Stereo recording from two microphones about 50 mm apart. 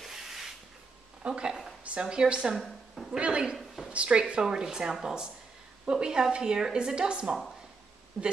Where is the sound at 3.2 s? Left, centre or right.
Centre.